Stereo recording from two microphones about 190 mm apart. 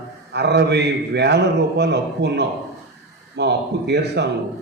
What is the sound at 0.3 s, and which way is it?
A man's voice, 60° right (ahead or behind).